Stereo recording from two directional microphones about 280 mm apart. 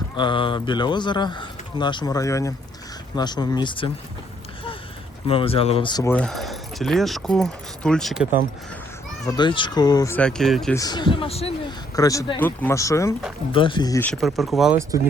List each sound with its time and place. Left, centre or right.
0.2 s speech: centre
5.3 s speech: centre
9.2 s speech: centre
10.8 s speech: centre